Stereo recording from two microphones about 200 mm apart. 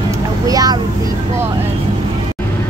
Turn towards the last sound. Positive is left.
turn(degrees=-20)  # may be behind; listen again after turning